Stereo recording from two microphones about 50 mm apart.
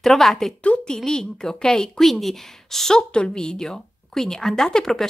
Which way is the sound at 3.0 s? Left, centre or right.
Centre.